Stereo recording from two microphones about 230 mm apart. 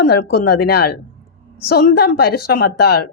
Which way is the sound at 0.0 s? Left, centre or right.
Left.